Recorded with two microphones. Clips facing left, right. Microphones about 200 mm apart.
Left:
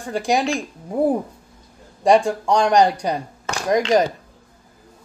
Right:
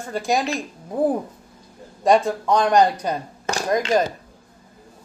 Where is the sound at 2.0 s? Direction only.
15° left (ahead or behind).